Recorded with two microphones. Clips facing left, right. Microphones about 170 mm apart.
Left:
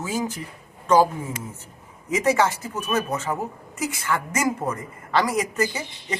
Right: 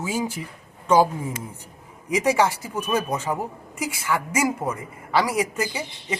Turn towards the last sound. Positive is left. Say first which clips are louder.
# right 1 dB
turn(degrees=-10)  # may be behind; listen again after turning